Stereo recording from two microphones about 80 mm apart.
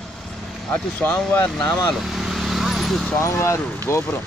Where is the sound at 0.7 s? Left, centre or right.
Centre.